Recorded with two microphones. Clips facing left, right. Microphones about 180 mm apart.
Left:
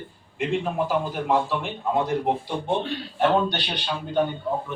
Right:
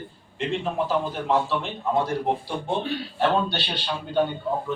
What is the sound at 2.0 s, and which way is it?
Speech, 20° left (ahead or behind).